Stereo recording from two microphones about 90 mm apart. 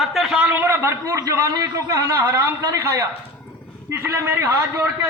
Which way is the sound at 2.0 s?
25° right (ahead or behind).